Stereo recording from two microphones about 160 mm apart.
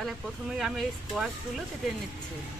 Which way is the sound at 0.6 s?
Centre (ahead or behind).